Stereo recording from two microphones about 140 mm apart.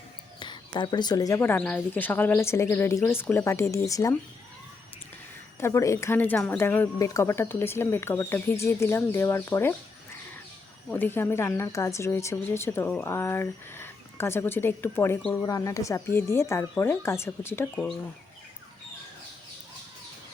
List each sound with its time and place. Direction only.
0.3 s speech: 35° left (ahead or behind)
1.4 s speech: 15° left (ahead or behind)
5.5 s speech: 20° left (ahead or behind)
10.8 s speech: 15° left (ahead or behind)